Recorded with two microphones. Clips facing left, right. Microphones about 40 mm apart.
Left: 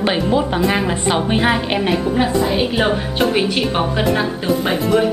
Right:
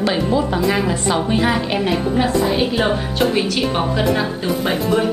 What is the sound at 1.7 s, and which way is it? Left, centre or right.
A woman's voice, centre.